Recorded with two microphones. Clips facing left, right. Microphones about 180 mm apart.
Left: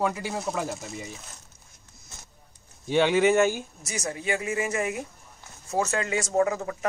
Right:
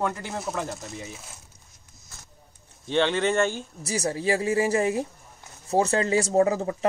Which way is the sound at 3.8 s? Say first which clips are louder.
Right 6 dB; 35° right (ahead or behind).